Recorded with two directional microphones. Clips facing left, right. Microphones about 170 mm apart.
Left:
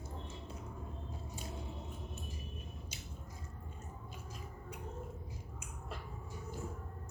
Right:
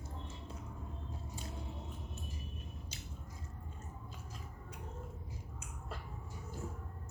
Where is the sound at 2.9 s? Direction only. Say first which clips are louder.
Even; 10° left (ahead or behind).